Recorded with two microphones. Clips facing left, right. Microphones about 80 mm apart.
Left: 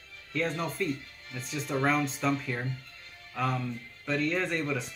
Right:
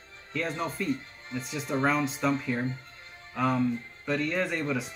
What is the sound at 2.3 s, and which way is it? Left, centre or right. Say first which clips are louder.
Speech: right 3 dB; right.